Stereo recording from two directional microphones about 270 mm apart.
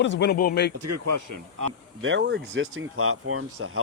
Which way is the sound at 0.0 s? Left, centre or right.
Left.